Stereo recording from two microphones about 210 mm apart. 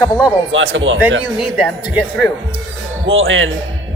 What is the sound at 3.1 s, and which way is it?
Speech, 65° right (ahead or behind).